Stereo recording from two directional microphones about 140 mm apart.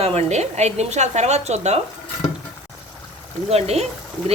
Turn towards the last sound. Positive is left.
turn(degrees=-50)  # may be behind; listen again after turning